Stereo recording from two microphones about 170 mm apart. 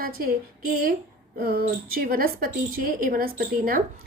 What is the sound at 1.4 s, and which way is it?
A woman's voice, 65° right (ahead or behind).